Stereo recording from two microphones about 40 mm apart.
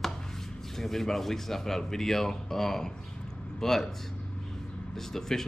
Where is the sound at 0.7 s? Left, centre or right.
Centre.